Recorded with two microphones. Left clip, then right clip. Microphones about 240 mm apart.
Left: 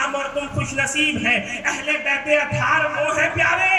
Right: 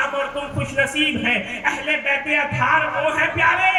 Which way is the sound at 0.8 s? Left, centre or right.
Centre.